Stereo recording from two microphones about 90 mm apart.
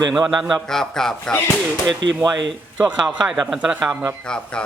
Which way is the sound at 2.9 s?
10° right (ahead or behind).